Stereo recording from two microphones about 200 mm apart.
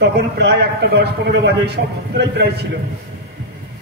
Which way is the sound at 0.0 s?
55° right (ahead or behind).